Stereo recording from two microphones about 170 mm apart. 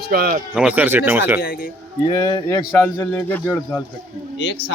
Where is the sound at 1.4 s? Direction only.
55° left (ahead or behind).